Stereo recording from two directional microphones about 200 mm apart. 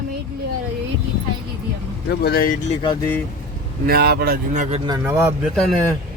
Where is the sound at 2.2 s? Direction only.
50° left (ahead or behind).